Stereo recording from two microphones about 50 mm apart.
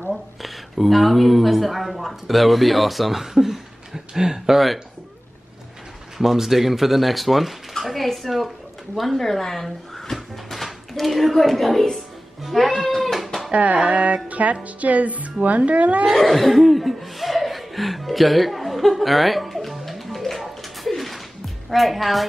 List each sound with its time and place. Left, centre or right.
0.1 s a woman's voice: centre
6.1 s speech: centre
12.4 s music: centre
13.5 s speech: right
13.8 s music: right
16.1 s laughter: centre
21.6 s a woman's voice: centre